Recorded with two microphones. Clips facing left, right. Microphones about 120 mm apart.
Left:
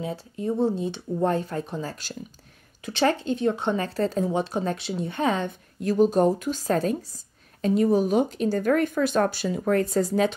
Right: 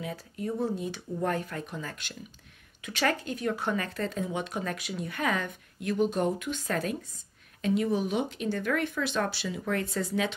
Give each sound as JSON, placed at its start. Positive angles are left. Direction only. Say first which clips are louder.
{"t": 0.0, "sound": "speech", "louder": "left 5 dB", "side_deg": 25}